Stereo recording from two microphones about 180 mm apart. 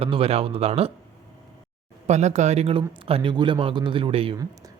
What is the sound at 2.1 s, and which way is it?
Speech, 40° right (ahead or behind).